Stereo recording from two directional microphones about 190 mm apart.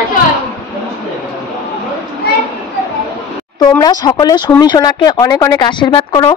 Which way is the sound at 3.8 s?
20° left (ahead or behind).